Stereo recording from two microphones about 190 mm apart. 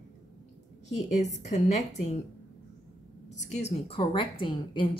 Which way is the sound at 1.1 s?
40° left (ahead or behind).